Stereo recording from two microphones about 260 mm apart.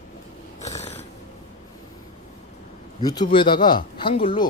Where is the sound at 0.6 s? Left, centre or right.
Left.